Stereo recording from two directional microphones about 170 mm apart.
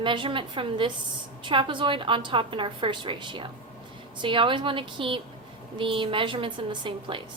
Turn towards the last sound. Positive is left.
turn(degrees=-30)  # may be behind; listen again after turning